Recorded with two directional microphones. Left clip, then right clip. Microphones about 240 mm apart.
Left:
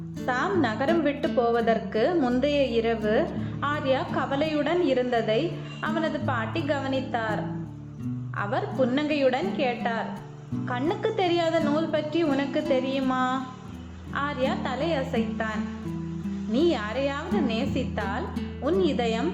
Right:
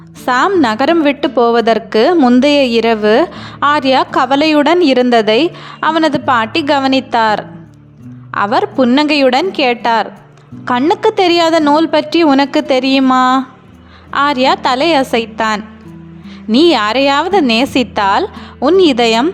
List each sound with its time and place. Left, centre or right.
0.3 s a woman's voice: right